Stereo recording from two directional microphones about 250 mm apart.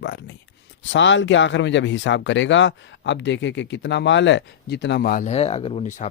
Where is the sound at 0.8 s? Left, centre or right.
Left.